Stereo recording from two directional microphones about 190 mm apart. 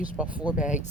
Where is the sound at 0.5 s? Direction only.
40° left (ahead or behind).